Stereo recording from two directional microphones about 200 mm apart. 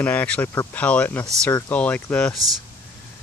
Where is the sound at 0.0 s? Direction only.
5° left (ahead or behind).